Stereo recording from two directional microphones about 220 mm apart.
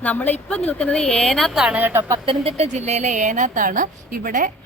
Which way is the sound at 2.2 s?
25° right (ahead or behind).